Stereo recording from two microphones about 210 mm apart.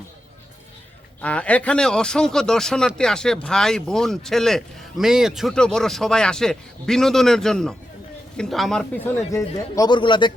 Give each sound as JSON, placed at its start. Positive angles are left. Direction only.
{"t": 1.2, "sound": "speech", "side_deg": 5}
{"t": 9.1, "sound": "speech", "side_deg": 15}